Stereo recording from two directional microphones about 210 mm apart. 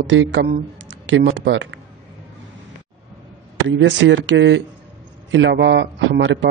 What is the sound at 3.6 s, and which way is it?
Speech, 60° right (ahead or behind).